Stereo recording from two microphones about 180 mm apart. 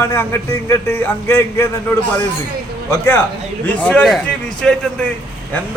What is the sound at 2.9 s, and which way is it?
A man's voice, 10° left (ahead or behind).